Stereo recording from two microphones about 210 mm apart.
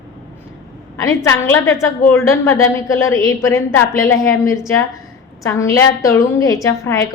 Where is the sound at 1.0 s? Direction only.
15° left (ahead or behind).